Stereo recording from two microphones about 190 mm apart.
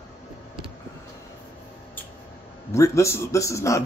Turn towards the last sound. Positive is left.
turn(degrees=15)  # may be behind; listen again after turning